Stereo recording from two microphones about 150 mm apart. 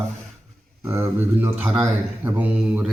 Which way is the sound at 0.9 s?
15° right (ahead or behind).